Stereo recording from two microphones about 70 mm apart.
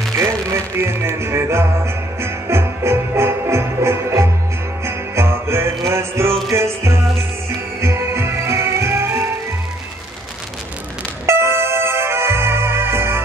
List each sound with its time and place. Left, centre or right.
0.2 s music: right
11.2 s music: right